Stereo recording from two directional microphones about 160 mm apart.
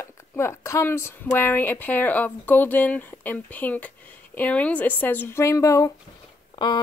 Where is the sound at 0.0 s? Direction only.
15° left (ahead or behind).